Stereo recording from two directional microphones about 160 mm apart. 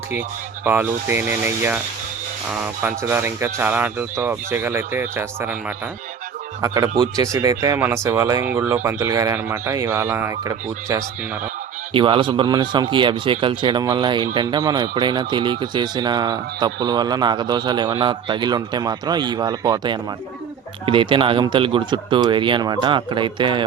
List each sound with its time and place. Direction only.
0.6 s speech: 10° right (ahead or behind)
2.8 s speech: 15° right (ahead or behind)
6.6 s speech: 25° right (ahead or behind)
11.9 s speech: 30° right (ahead or behind)